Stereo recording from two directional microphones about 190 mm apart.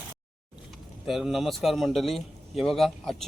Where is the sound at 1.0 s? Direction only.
Centre (ahead or behind).